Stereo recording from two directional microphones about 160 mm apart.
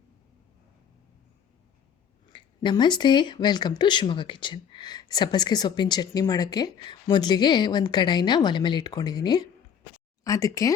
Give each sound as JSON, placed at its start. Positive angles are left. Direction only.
{"t": 2.3, "sound": "speech", "side_deg": 30}